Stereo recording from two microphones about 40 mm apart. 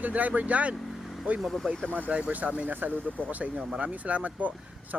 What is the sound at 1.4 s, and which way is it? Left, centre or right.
Speech, centre.